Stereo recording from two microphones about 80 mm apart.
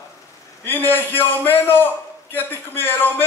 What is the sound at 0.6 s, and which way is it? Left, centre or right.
A man's voice, left.